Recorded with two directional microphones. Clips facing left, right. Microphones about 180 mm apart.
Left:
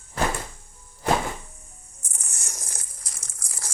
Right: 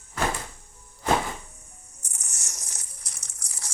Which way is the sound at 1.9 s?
90° left.